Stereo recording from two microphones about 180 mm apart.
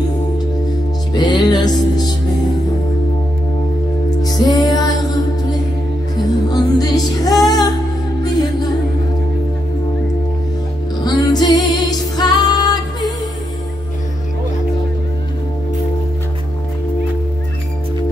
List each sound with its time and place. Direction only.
1.1 s music: 20° left (ahead or behind)
4.2 s music: 20° left (ahead or behind)
6.5 s music: 20° left (ahead or behind)
11.1 s music: 25° left (ahead or behind)